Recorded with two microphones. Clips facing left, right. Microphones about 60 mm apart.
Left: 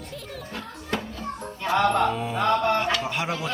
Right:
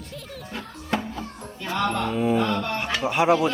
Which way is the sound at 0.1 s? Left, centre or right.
Centre.